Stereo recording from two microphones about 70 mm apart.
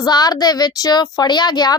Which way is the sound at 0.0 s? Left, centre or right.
Left.